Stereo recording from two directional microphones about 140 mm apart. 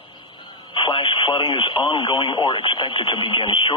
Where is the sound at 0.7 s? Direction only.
35° left (ahead or behind).